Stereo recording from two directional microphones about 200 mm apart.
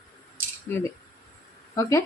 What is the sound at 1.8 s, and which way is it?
Speech, 15° left (ahead or behind).